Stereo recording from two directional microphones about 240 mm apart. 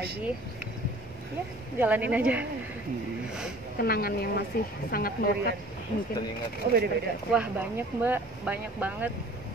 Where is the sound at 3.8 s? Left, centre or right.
Left.